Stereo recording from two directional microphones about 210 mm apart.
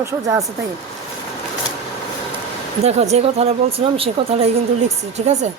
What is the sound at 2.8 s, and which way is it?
A woman's voice, 30° right (ahead or behind).